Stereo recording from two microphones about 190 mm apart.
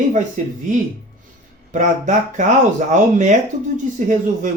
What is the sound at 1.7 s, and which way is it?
Speech, 40° right (ahead or behind).